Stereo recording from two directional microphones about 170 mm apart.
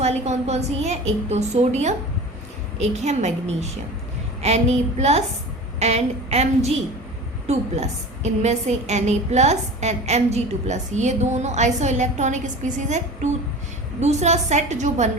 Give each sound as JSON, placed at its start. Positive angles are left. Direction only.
{"t": 0.0, "sound": "a woman's voice", "side_deg": -40}